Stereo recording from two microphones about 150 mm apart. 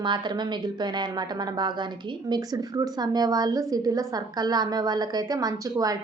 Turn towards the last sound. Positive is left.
turn(degrees=-25)  # may be behind; listen again after turning